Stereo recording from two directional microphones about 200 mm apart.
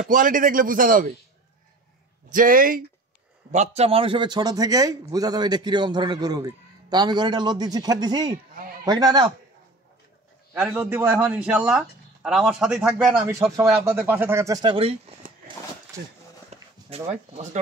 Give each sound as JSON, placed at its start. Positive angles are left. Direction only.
{"t": 0.1, "sound": "a man's voice", "side_deg": -40}
{"t": 2.3, "sound": "a man's voice", "side_deg": -45}
{"t": 3.5, "sound": "a man's voice", "side_deg": -30}
{"t": 10.7, "sound": "speech", "side_deg": -10}
{"t": 15.9, "sound": "speech", "side_deg": -15}
{"t": 16.9, "sound": "speech", "side_deg": -35}